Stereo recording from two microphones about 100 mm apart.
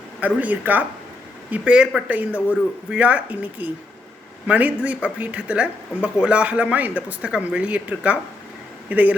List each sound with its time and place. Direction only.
0.3 s speech: 15° right (ahead or behind)